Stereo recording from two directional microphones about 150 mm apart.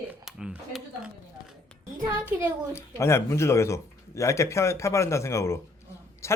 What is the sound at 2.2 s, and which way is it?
Speech, 10° right (ahead or behind).